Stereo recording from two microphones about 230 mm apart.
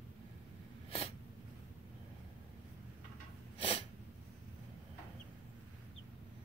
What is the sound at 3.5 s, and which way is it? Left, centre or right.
Sneeze, left.